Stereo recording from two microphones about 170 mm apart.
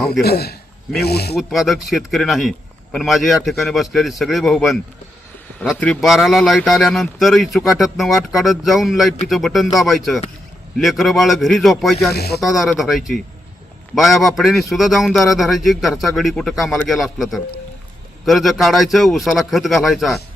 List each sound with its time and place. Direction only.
0.0 s a man's voice: 70° left (ahead or behind)
1.4 s a man's voice: centre (ahead or behind)
12.1 s a man's voice: 70° left (ahead or behind)
12.4 s a man's voice: centre (ahead or behind)
17.0 s a man's voice: centre (ahead or behind)